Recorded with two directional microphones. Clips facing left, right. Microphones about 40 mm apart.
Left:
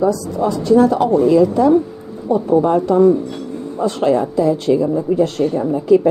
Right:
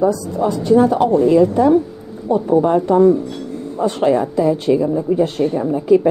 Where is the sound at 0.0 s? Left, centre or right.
Right.